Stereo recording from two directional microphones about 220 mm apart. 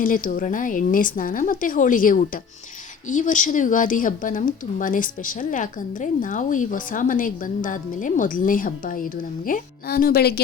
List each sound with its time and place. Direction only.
0.0 s a woman's voice: 40° left (ahead or behind)